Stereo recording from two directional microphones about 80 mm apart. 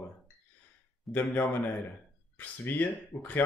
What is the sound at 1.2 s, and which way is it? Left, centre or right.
Speech, left.